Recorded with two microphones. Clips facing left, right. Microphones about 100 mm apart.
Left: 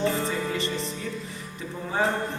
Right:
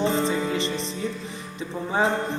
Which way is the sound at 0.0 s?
20° right (ahead or behind).